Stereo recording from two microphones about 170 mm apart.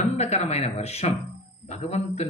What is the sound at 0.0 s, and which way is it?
Speech, 40° left (ahead or behind).